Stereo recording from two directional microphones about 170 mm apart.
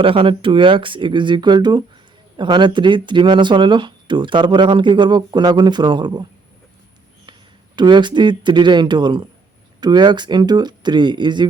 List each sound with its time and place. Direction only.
0.0 s speech: 30° right (ahead or behind)
7.8 s speech: 25° right (ahead or behind)